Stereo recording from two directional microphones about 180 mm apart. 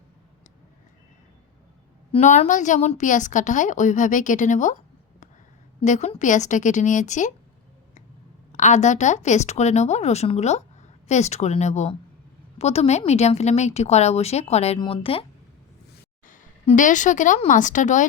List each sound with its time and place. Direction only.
2.1 s a woman's voice: 35° left (ahead or behind)
5.8 s a woman's voice: 40° left (ahead or behind)
8.5 s a woman's voice: 40° left (ahead or behind)
16.2 s a woman's voice: 45° left (ahead or behind)